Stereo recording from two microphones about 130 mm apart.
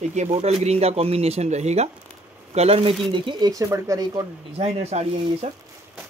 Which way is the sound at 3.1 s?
35° right (ahead or behind).